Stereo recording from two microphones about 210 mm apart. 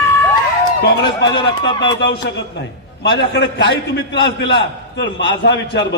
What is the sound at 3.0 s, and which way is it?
A man's voice, 55° left (ahead or behind).